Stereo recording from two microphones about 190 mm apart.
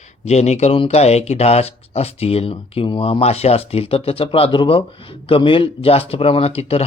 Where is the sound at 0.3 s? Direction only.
35° left (ahead or behind).